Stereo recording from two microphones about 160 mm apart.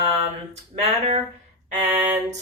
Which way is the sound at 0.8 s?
40° right (ahead or behind).